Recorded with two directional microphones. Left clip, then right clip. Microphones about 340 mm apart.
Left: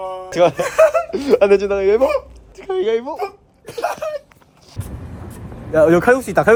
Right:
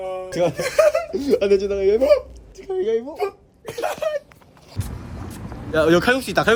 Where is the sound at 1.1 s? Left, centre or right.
Centre.